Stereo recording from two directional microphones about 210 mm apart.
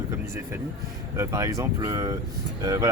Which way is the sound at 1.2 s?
15° right (ahead or behind).